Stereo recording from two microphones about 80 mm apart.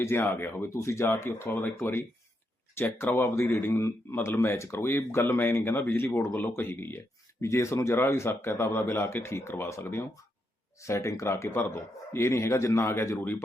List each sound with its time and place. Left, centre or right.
0.0 s speech: left
7.4 s speech: left